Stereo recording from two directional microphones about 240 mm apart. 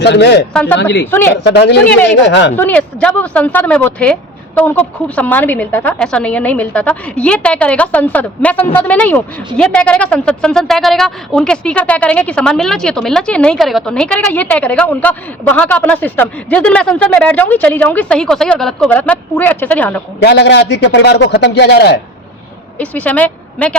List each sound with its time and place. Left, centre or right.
0.0 s a man's voice: left
0.5 s speech: centre
1.5 s a man's voice: left
2.6 s a woman's voice: centre
20.2 s a man's voice: left
22.8 s speech: centre